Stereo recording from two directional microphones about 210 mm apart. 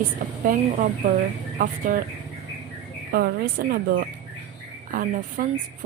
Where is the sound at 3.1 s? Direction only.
45° right (ahead or behind).